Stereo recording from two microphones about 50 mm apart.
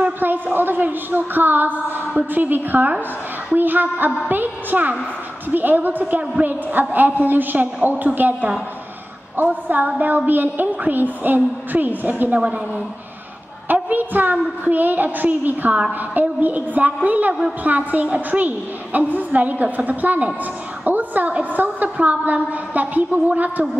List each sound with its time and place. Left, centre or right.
0.2 s a woman's voice: right
13.8 s a woman's voice: right
18.9 s a woman's voice: right